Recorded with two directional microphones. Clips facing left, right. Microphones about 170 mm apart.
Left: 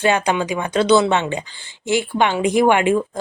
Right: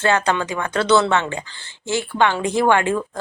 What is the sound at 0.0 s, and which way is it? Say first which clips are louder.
Speech: left 1 dB; 15° left (ahead or behind).